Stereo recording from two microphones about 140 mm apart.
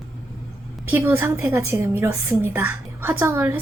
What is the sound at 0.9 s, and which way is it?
A woman's voice, 15° right (ahead or behind).